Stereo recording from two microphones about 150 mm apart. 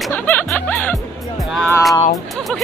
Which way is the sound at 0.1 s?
10° left (ahead or behind).